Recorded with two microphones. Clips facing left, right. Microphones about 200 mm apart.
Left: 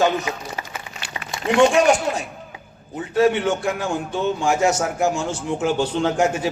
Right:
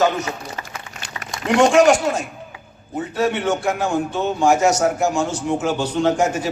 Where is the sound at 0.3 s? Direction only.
10° left (ahead or behind).